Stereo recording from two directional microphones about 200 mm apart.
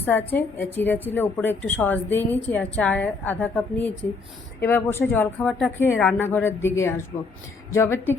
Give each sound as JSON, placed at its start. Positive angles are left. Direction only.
{"t": 0.0, "sound": "a woman's voice", "side_deg": 10}